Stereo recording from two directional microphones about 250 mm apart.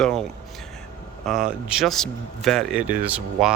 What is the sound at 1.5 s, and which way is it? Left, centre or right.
Speech, centre.